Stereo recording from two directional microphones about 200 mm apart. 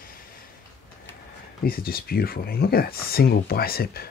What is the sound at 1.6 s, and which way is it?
Speech, 50° left (ahead or behind).